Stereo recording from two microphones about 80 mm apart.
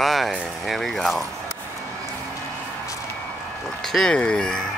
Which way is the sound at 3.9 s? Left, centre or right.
Centre.